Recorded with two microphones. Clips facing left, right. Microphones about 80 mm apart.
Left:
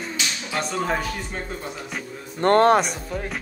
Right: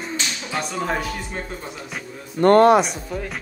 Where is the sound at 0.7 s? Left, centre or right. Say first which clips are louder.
Even; centre.